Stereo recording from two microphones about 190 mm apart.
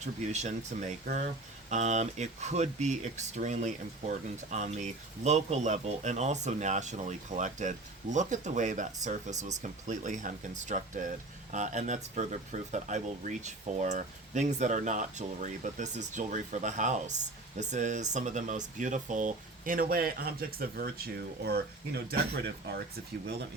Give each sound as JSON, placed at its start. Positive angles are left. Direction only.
{"t": 0.0, "sound": "speech", "side_deg": -35}